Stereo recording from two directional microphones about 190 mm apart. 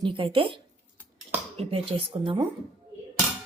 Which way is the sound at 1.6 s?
30° right (ahead or behind).